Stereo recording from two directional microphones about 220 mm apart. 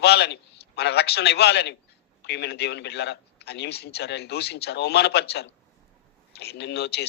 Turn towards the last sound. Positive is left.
turn(degrees=50)  # may be behind; listen again after turning